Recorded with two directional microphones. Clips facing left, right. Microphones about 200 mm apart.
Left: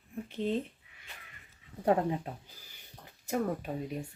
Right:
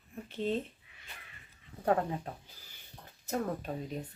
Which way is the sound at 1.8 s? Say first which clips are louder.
Left 2 dB; 20° left (ahead or behind).